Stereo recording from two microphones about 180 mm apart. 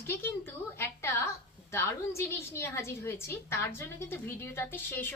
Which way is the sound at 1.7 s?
15° left (ahead or behind).